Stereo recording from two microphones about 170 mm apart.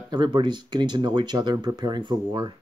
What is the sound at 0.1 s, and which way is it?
Speech, 25° right (ahead or behind).